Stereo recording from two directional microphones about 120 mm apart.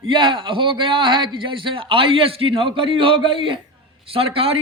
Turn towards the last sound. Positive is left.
turn(degrees=-50)  # may be behind; listen again after turning